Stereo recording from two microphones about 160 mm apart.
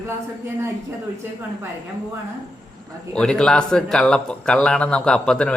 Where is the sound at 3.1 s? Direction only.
5° left (ahead or behind).